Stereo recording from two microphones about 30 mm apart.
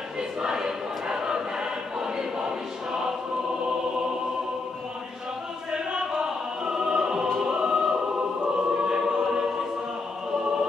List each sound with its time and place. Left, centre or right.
0.4 s choir: centre
5.7 s choir: right